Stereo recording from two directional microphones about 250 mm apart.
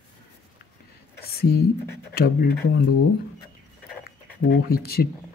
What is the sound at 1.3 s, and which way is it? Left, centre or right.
Speech, left.